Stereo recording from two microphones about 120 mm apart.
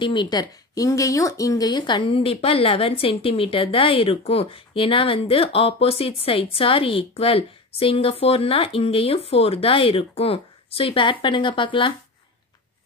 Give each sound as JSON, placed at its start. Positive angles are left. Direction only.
{"t": 0.0, "sound": "speech", "side_deg": 40}